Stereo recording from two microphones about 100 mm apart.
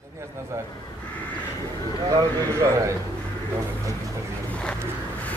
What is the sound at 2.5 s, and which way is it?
Speech, 30° right (ahead or behind).